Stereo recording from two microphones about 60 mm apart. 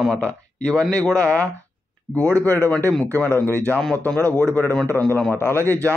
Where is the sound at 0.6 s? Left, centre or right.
Centre.